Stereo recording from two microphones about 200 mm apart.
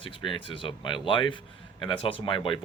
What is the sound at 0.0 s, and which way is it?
Speech, 25° left (ahead or behind).